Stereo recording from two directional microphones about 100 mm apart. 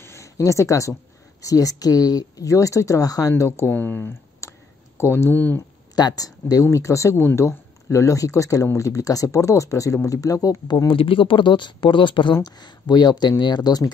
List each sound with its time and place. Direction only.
0.0 s a sound: 30° left (ahead or behind)
1.4 s speech: 35° left (ahead or behind); by 5.6 s 20° left (ahead or behind)
5.9 s speech: 40° left (ahead or behind)
10.9 s speech: 60° left (ahead or behind); by 13.9 s 40° left (ahead or behind)